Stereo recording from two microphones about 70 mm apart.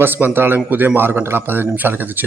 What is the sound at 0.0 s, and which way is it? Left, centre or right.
Speech, right.